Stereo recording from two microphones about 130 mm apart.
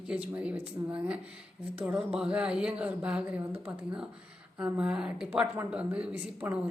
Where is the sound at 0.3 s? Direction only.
10° right (ahead or behind).